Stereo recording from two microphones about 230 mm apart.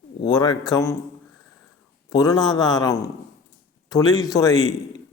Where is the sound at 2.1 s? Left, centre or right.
Centre.